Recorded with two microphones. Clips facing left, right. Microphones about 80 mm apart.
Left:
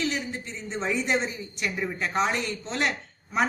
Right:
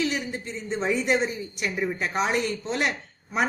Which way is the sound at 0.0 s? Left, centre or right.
Centre.